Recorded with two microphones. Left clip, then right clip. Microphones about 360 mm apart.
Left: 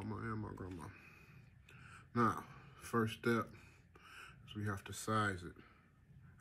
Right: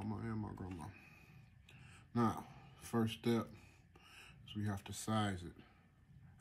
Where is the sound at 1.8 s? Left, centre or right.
Right.